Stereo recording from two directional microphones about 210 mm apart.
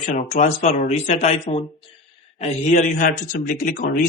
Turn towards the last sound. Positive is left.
turn(degrees=40)  # may be behind; listen again after turning